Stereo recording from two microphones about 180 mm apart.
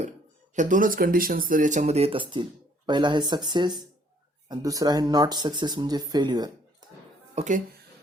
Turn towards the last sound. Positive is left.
turn(degrees=-40)  # may be behind; listen again after turning